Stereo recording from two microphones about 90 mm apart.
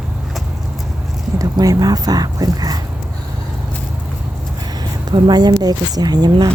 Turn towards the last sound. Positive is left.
turn(degrees=-50)  # may be behind; listen again after turning